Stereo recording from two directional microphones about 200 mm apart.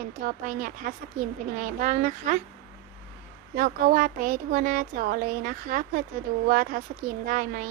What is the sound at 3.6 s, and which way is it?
Speech, 45° right (ahead or behind).